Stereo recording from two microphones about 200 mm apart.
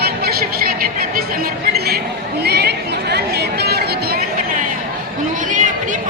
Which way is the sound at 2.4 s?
55° right (ahead or behind).